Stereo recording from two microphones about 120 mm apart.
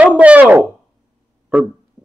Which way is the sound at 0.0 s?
10° right (ahead or behind).